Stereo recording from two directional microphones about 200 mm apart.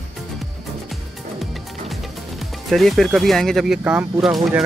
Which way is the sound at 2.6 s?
Centre (ahead or behind).